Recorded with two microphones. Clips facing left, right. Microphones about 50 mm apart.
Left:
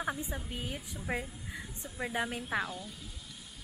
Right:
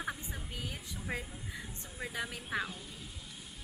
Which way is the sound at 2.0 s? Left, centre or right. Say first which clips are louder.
Left 5 dB; left.